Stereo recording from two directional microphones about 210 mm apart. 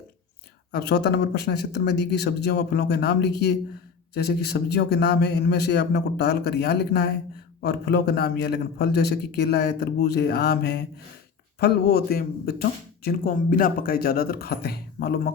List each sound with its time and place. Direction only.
0.7 s speech: 50° left (ahead or behind)